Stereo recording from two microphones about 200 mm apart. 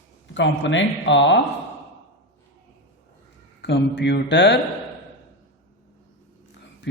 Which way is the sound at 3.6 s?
65° left (ahead or behind).